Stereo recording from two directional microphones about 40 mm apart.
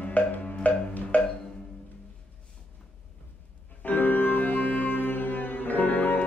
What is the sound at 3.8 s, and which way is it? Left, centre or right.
Music, left.